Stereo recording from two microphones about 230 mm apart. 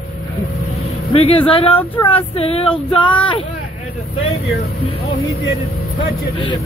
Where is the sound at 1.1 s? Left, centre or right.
Left.